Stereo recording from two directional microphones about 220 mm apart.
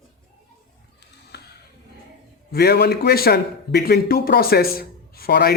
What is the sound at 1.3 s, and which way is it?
Music, 50° left (ahead or behind).